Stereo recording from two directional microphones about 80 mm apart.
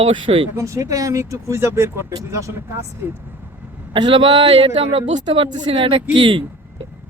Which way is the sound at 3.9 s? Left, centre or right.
Right.